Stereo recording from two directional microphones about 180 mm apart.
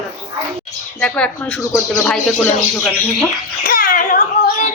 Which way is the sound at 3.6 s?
50° left (ahead or behind).